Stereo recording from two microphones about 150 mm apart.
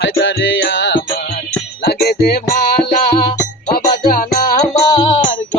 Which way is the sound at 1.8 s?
90° left.